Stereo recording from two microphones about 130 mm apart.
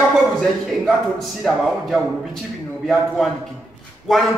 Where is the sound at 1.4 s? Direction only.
Centre (ahead or behind).